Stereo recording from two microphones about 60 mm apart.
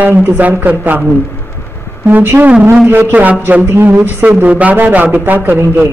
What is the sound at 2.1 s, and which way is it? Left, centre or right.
Speech, right.